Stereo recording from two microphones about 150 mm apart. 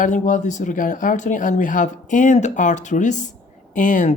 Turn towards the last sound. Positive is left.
turn(degrees=60)  # may be behind; listen again after turning